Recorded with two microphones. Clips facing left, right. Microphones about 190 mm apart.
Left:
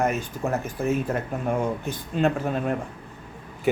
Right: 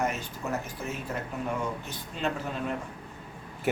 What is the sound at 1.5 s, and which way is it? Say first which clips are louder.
Speech: left 10 dB; 50° left (ahead or behind).